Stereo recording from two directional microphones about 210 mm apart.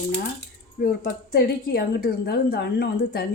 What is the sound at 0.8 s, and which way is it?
A woman's voice, 45° left (ahead or behind).